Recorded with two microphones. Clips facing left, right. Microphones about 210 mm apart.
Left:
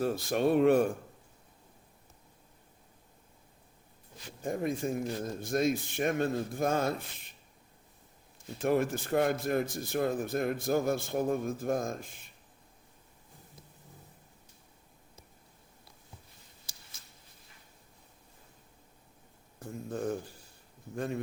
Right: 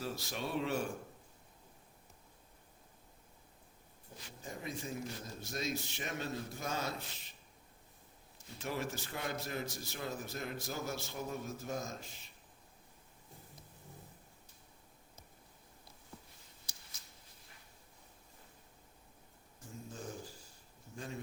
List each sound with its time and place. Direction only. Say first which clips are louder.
0.0 s a man's voice: left 12 dB; 55° left (ahead or behind)
4.4 s a man's voice: left 11 dB; 55° left (ahead or behind)
8.5 s a man's voice: left 11 dB; 55° left (ahead or behind)
19.5 s a sound: left 11 dB; 60° left (ahead or behind)
20.9 s a man's voice: left 11 dB; 60° left (ahead or behind)